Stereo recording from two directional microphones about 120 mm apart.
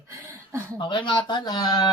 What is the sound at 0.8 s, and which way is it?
Speech, 45° left (ahead or behind).